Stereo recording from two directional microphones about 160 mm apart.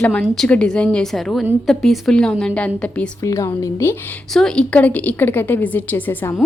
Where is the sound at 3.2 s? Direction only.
20° left (ahead or behind).